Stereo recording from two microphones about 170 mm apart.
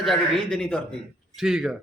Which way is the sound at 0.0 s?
Centre (ahead or behind).